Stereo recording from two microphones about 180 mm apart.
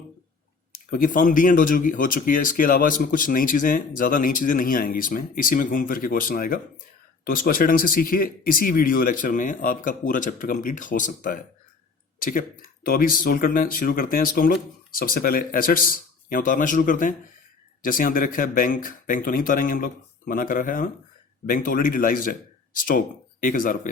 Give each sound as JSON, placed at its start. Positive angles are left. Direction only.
{"t": 0.7, "sound": "speech", "side_deg": 50}